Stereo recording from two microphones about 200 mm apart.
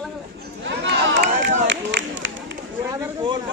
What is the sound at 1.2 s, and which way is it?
Run, 65° right (ahead or behind).